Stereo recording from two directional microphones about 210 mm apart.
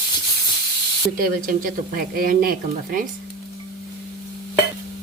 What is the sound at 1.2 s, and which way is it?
Speech, 45° right (ahead or behind).